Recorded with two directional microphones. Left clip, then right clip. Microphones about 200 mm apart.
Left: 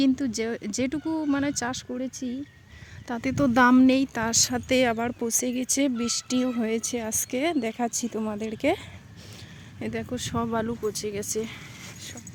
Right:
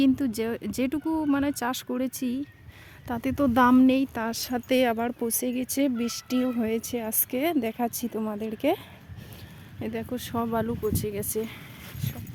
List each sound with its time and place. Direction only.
0.0 s speech: 5° right (ahead or behind)
1.7 s speech: 20° right (ahead or behind)
3.1 s speech: centre (ahead or behind)
9.8 s speech: centre (ahead or behind)